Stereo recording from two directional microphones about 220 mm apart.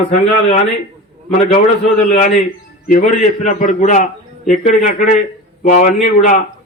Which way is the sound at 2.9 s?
35° left (ahead or behind).